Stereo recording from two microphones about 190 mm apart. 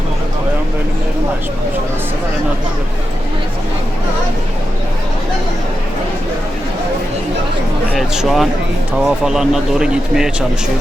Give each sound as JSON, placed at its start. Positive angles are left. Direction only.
{"t": 7.9, "sound": "speech", "side_deg": 0}